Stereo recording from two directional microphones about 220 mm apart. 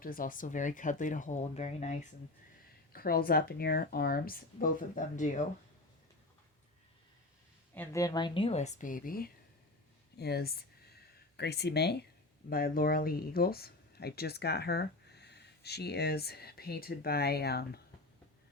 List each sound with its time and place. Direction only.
0.0 s speech: 40° left (ahead or behind)
7.7 s speech: 10° left (ahead or behind); by 17.7 s 45° left (ahead or behind)